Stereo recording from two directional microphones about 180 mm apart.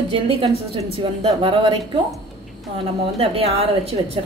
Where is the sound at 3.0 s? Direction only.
30° right (ahead or behind).